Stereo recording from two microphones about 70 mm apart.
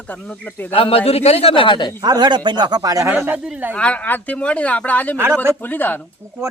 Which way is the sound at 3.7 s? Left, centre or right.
Centre.